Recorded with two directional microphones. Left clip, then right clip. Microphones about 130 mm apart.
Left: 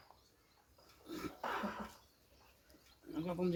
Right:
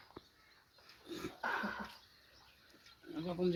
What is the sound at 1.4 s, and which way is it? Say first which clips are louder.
Dog: right 3 dB; 25° left (ahead or behind).